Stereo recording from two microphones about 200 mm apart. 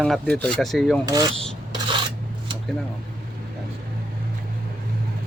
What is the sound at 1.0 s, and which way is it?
Speech, 20° right (ahead or behind).